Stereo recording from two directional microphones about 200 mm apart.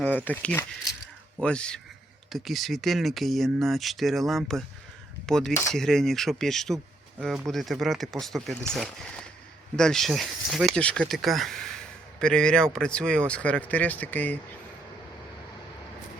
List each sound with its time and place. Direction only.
0.0 s speech: 10° left (ahead or behind)